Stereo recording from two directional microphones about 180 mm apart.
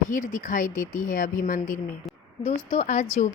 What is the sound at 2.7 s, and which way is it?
Speech, 40° left (ahead or behind).